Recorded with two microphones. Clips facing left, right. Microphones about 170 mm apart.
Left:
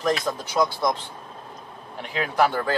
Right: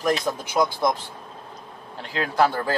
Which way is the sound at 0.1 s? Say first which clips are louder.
Right 1 dB; 15° right (ahead or behind).